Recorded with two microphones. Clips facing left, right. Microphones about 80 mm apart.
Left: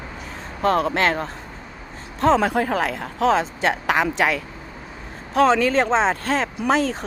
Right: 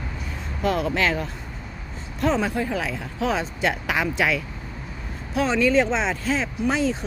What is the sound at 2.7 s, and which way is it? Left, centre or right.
Speech, left.